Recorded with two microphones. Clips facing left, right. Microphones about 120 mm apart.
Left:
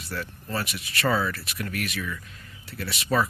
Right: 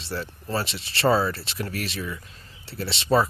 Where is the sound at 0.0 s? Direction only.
30° right (ahead or behind).